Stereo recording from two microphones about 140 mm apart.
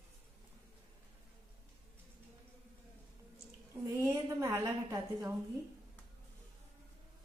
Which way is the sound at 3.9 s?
20° right (ahead or behind).